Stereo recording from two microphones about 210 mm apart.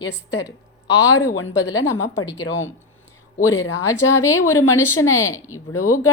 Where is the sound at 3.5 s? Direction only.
15° left (ahead or behind).